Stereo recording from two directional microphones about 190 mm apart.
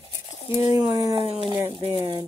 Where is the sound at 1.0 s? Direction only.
30° right (ahead or behind).